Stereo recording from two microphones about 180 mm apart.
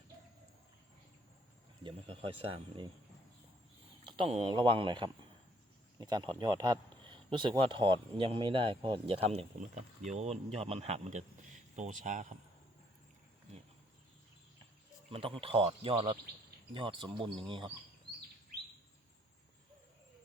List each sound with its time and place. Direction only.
1.8 s speech: 30° right (ahead or behind)
4.0 s speech: 30° right (ahead or behind)
15.1 s speech: 30° right (ahead or behind)